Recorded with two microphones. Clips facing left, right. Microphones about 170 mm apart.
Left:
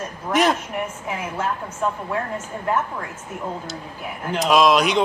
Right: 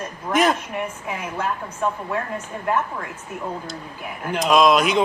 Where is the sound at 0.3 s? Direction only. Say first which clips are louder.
Even; centre (ahead or behind).